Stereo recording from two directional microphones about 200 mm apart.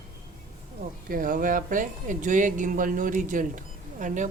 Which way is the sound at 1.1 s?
45° right (ahead or behind).